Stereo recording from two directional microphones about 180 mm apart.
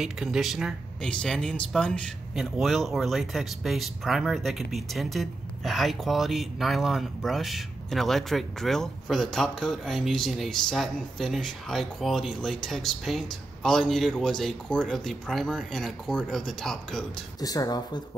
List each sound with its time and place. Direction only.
0.0 s speech: 5° right (ahead or behind)
17.4 s speech: 20° left (ahead or behind)